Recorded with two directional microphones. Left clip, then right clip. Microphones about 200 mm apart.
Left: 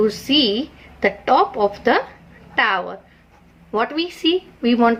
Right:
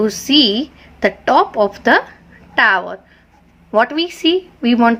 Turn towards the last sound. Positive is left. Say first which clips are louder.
# right 3 dB
turn(degrees=-35)  # may be behind; listen again after turning